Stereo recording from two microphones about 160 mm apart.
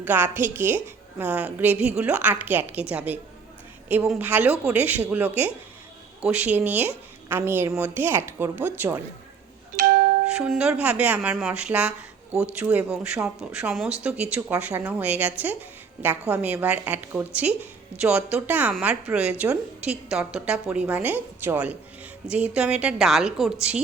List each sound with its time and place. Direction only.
0.0 s a woman's voice: 10° right (ahead or behind)
9.7 s music: 65° right (ahead or behind)
10.3 s a woman's voice: 5° right (ahead or behind)